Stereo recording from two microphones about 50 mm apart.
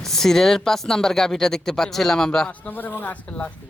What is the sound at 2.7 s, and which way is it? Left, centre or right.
Speech, left.